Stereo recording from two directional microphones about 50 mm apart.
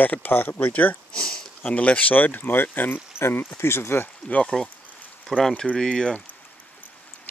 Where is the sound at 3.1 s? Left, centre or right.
Left.